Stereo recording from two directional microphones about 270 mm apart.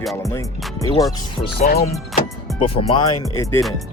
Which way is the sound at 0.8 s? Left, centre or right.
Centre.